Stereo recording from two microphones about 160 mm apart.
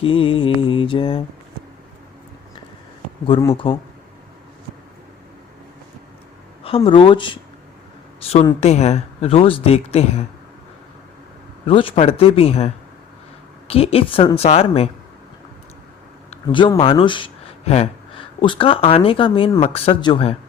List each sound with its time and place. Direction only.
0.0 s mantra: 35° left (ahead or behind)
3.5 s speech: 35° left (ahead or behind)
6.7 s speech: 35° left (ahead or behind)
11.6 s speech: 35° left (ahead or behind)
16.3 s speech: 30° left (ahead or behind)